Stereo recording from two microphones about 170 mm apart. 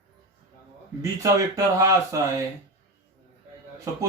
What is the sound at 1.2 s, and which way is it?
Speech, 20° right (ahead or behind).